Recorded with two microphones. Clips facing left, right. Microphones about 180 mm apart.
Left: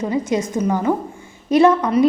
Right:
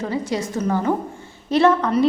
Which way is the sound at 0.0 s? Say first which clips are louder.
Left 4 dB; 20° left (ahead or behind).